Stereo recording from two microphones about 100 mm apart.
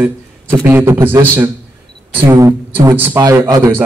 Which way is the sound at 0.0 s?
20° right (ahead or behind).